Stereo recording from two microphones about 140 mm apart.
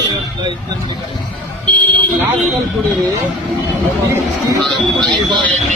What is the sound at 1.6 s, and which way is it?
Vehicle, 10° left (ahead or behind).